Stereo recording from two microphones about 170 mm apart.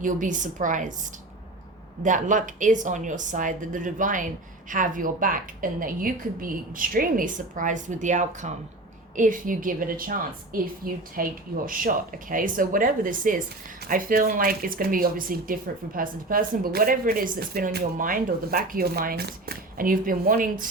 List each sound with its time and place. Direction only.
0.0 s a woman's voice: 50° right (ahead or behind)
2.0 s a woman's voice: 50° right (ahead or behind)